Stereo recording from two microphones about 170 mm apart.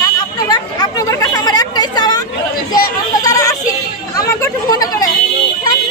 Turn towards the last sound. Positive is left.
turn(degrees=20)  # may be behind; listen again after turning